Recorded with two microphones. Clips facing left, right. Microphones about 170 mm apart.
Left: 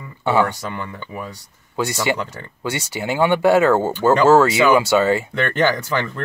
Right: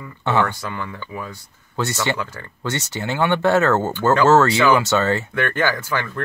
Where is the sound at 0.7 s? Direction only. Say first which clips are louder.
Even; 20° left (ahead or behind).